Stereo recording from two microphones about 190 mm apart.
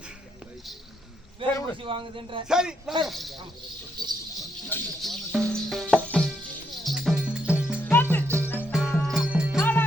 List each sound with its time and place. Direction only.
1.4 s speech: 25° right (ahead or behind)
2.5 s speech: 5° right (ahead or behind)
4.0 s jingle bell: 20° right (ahead or behind)
4.7 s speech: 10° left (ahead or behind)
5.0 s music: centre (ahead or behind)
7.8 s music: 10° left (ahead or behind)
8.5 s music: centre (ahead or behind)
9.6 s music: 10° left (ahead or behind)